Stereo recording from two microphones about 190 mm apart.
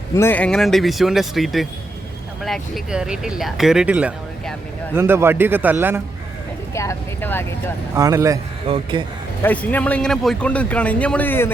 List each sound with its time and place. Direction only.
0.2 s a man's voice: 10° left (ahead or behind); by 5.7 s 10° right (ahead or behind)
6.7 s speech: 10° left (ahead or behind)
7.9 s a man's voice: 20° right (ahead or behind)
8.6 s speech: 25° right (ahead or behind)
9.4 s speech: 10° left (ahead or behind)